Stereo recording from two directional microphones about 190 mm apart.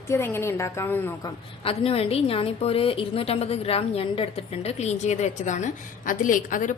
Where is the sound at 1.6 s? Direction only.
30° left (ahead or behind).